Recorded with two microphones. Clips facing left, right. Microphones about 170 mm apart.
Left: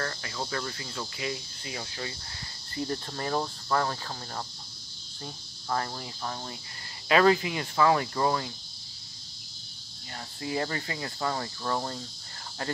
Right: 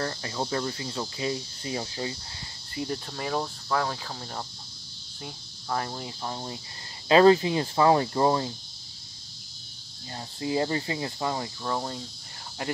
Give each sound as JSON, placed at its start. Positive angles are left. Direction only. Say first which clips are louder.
{"t": 0.0, "sound": "cricket", "louder": "right 4 dB", "side_deg": -25}
{"t": 2.7, "sound": "cricket", "louder": "even", "side_deg": -15}
{"t": 3.1, "sound": "speech", "louder": "even", "side_deg": -5}
{"t": 5.2, "sound": "speech", "louder": "right 1 dB", "side_deg": -10}
{"t": 7.1, "sound": "cricket", "louder": "right 5 dB", "side_deg": -30}
{"t": 10.1, "sound": "cricket", "louder": "right 4 dB", "side_deg": -25}
{"t": 12.6, "sound": "speech", "louder": "right 2 dB", "side_deg": -15}